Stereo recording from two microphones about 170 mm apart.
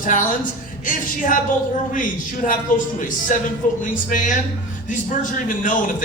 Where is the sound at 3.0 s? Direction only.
50° left (ahead or behind).